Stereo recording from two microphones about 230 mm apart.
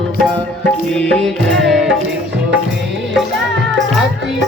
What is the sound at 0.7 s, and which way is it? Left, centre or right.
Music, centre.